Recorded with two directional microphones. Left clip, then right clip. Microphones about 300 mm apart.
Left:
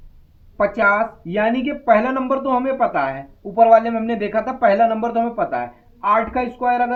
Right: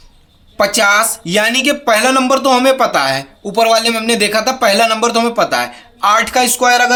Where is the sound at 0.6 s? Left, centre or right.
Right.